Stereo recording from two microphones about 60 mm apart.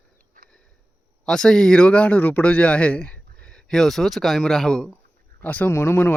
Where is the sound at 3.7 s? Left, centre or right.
Centre.